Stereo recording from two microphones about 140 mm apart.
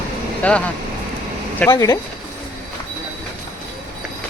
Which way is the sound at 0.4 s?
10° left (ahead or behind).